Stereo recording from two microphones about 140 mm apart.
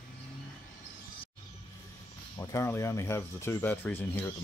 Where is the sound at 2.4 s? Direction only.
20° left (ahead or behind).